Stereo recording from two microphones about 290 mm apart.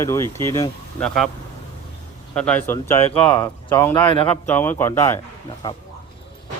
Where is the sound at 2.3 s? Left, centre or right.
Centre.